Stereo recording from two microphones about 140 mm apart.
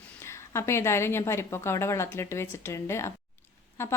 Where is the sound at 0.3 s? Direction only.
20° left (ahead or behind).